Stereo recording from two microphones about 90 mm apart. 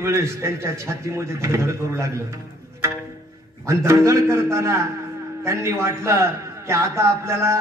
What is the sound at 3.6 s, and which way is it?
Music, 35° right (ahead or behind).